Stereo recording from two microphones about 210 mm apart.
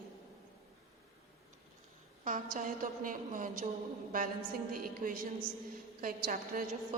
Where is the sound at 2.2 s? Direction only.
40° right (ahead or behind).